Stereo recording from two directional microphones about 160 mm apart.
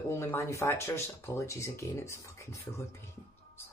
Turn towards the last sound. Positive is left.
turn(degrees=15)  # may be behind; listen again after turning